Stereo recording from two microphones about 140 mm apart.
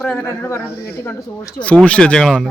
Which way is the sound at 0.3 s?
15° left (ahead or behind).